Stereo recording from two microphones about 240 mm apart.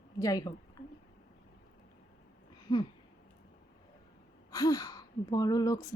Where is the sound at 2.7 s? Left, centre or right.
Centre.